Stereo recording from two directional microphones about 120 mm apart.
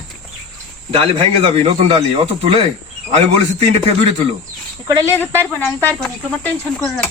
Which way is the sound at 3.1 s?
65° right (ahead or behind).